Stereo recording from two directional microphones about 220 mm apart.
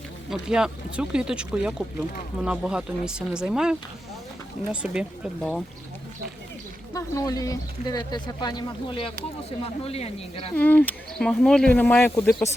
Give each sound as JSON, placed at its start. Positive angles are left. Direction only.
{"t": 0.3, "sound": "speech", "side_deg": -5}
{"t": 6.9, "sound": "speech", "side_deg": 15}
{"t": 10.5, "sound": "speech", "side_deg": 5}